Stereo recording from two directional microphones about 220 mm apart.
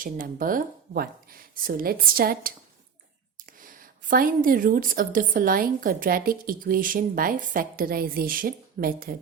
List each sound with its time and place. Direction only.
0.0 s a woman's voice: 40° right (ahead or behind)